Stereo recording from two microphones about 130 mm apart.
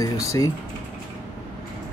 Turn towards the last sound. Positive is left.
turn(degrees=25)  # may be behind; listen again after turning